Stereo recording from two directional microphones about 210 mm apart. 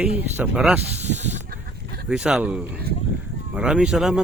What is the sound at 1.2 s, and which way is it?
Snake, 35° right (ahead or behind).